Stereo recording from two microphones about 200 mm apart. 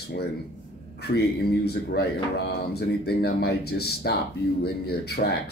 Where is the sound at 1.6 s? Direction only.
50° left (ahead or behind).